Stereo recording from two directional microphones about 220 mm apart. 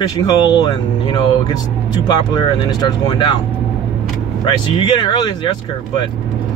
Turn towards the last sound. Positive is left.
turn(degrees=20)  # may be behind; listen again after turning